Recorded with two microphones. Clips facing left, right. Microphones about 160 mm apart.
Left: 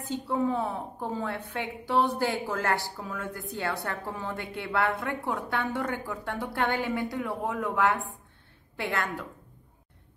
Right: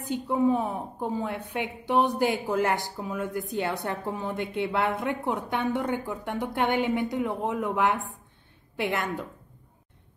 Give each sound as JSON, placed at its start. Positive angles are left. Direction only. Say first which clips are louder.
{"t": 0.0, "sound": "a woman's voice", "louder": "right 4 dB", "side_deg": -15}